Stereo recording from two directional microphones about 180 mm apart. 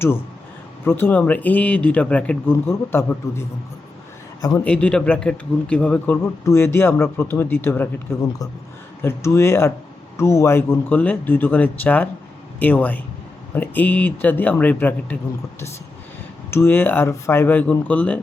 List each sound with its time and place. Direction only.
0.9 s a man's voice: 10° left (ahead or behind)
4.6 s a man's voice: 5° left (ahead or behind)
16.5 s speech: 10° left (ahead or behind)